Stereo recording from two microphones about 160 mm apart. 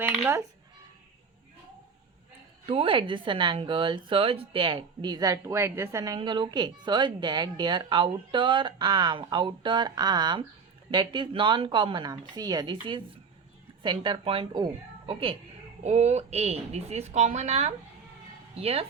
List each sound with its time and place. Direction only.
0.0 s speech: 10° right (ahead or behind)
2.6 s a woman's voice: 35° right (ahead or behind)
15.8 s a woman's voice: 45° right (ahead or behind)